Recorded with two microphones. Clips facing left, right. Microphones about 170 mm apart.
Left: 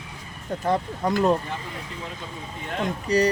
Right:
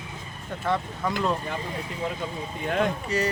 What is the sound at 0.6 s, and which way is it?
Speech, 40° left (ahead or behind).